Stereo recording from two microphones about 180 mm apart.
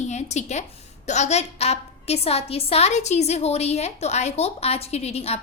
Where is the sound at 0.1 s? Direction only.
40° left (ahead or behind).